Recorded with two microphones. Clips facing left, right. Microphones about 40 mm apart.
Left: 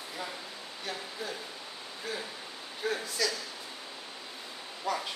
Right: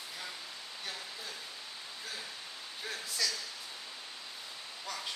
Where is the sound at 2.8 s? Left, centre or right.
Centre.